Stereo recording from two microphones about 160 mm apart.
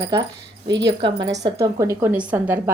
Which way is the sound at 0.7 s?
90° right.